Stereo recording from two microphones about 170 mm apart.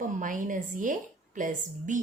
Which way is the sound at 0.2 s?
50° right (ahead or behind).